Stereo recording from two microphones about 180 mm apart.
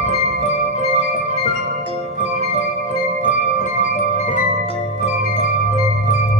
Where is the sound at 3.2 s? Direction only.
40° left (ahead or behind).